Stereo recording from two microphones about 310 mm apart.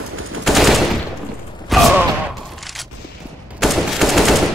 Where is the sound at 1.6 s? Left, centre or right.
Centre.